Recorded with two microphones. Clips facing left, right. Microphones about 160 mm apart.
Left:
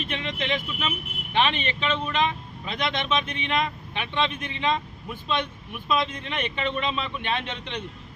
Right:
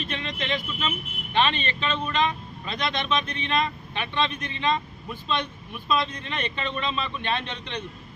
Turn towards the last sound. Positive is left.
turn(degrees=15)  # may be behind; listen again after turning